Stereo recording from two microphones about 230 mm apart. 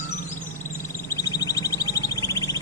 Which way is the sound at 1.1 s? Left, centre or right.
Centre.